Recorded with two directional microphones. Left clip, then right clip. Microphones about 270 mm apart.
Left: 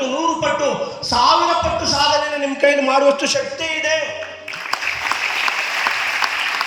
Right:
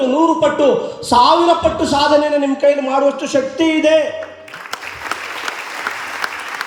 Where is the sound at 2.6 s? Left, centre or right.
Right.